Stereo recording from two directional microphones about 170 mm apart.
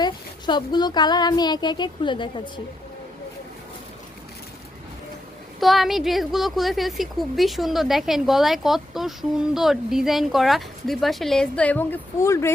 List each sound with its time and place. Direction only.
0.0 s speech: 25° left (ahead or behind)
5.5 s a woman's voice: centre (ahead or behind); by 12.5 s 15° left (ahead or behind)